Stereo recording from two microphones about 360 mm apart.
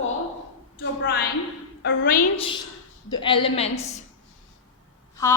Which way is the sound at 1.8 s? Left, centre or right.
Left.